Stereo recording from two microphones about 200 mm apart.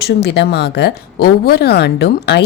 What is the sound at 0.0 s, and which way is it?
Speech, 55° left (ahead or behind).